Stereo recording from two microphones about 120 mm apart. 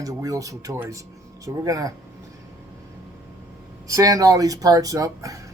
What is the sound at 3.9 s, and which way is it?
Speech, 30° right (ahead or behind).